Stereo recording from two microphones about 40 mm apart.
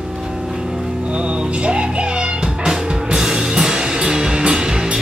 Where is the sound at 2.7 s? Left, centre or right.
Centre.